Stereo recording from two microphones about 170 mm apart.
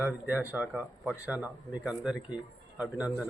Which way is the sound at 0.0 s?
10° right (ahead or behind).